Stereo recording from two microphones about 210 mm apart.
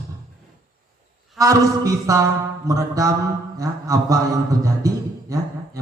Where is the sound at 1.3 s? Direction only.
15° right (ahead or behind).